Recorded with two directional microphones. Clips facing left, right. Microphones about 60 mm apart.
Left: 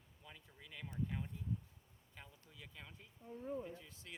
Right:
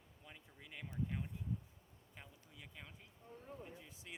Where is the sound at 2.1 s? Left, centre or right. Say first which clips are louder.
Even; centre.